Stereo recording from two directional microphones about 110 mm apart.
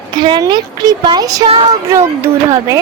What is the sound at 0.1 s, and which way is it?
A woman's voice, 40° right (ahead or behind).